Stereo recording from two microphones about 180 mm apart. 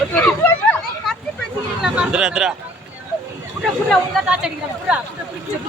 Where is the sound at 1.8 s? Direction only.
5° right (ahead or behind).